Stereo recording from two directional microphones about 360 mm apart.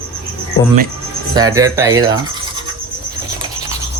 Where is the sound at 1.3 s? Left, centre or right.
Centre.